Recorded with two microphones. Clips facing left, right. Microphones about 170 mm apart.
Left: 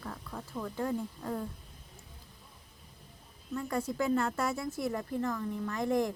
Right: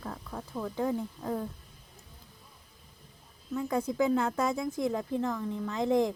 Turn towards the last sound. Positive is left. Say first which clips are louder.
# right 3 dB
turn(degrees=-20)  # may be behind; listen again after turning